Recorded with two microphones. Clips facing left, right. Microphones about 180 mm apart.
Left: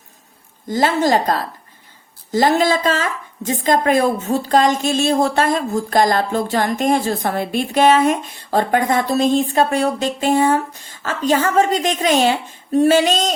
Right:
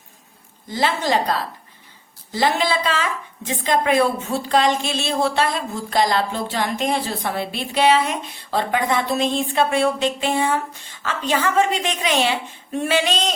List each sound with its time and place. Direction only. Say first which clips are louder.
0.7 s a woman's voice: left 5 dB; 45° left (ahead or behind)